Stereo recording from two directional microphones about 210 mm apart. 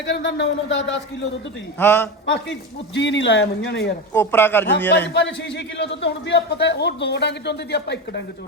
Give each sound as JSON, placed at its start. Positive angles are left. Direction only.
{"t": 0.0, "sound": "a man's voice", "side_deg": 55}
{"t": 1.8, "sound": "speech", "side_deg": 10}
{"t": 2.3, "sound": "a man's voice", "side_deg": 55}
{"t": 4.1, "sound": "speech", "side_deg": 10}
{"t": 5.0, "sound": "a man's voice", "side_deg": 55}